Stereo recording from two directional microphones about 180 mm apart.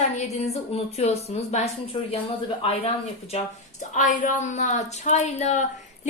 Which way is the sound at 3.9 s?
45° left (ahead or behind).